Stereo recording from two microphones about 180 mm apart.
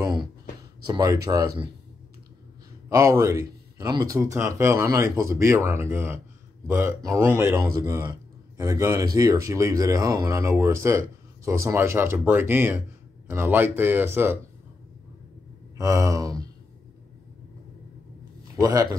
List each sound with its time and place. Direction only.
0.0 s a sound: 20° right (ahead or behind)
0.8 s speech: 20° right (ahead or behind)
2.9 s speech: 15° right (ahead or behind)
15.8 s speech: 15° right (ahead or behind)
18.6 s speech: 20° right (ahead or behind)